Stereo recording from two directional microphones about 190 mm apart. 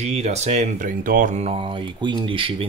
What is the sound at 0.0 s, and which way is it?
Speech, 35° right (ahead or behind).